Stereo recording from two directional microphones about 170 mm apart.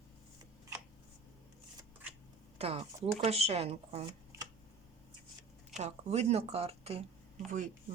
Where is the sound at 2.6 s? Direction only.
35° right (ahead or behind).